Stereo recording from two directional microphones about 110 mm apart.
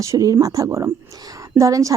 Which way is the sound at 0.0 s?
30° right (ahead or behind).